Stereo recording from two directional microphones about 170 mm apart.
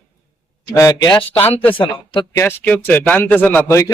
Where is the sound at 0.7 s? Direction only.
20° left (ahead or behind).